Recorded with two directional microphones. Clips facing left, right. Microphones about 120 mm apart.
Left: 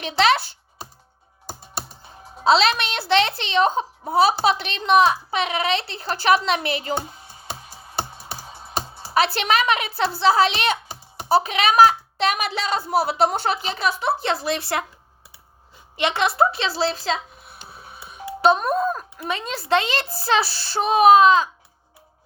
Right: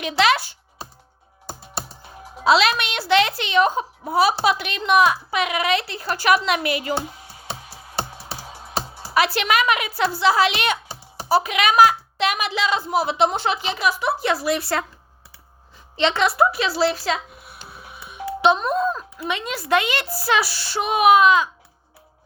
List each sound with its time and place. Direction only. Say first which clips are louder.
2.4 s speech: even; 35° left (ahead or behind)
9.1 s speech: even; 35° left (ahead or behind)
13.8 s a woman's voice: right 1 dB; 30° left (ahead or behind)
16.0 s a woman's voice: right 1 dB; 15° left (ahead or behind)
17.7 s telephone dialing: right 1 dB; 35° left (ahead or behind)
18.4 s speech: even; 50° left (ahead or behind)
19.3 s speech: even; 35° left (ahead or behind)